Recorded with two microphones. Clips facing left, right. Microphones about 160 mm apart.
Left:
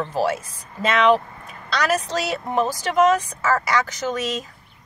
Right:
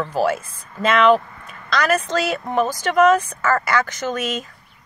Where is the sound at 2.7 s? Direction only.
5° left (ahead or behind).